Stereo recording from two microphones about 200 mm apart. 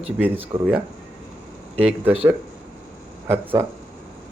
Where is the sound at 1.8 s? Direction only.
5° right (ahead or behind).